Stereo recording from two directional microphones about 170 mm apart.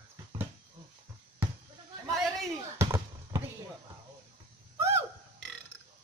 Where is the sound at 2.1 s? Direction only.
Centre (ahead or behind).